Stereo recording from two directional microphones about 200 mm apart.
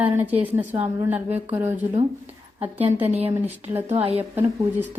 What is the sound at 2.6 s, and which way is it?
Speech, 30° right (ahead or behind).